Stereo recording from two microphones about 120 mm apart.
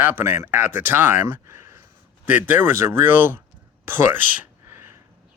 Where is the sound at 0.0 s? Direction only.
20° right (ahead or behind).